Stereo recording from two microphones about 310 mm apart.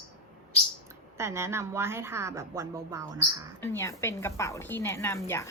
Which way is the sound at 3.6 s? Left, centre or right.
Centre.